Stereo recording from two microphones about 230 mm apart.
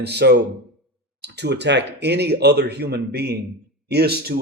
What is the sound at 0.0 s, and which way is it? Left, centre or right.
Speech, right.